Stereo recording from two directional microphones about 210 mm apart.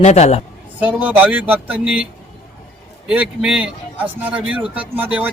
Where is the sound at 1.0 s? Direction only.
10° right (ahead or behind).